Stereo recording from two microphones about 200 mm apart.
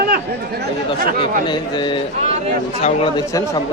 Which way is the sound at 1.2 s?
20° left (ahead or behind).